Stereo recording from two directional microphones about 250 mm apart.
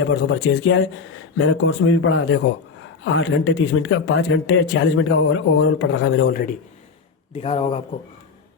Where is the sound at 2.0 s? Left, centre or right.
Left.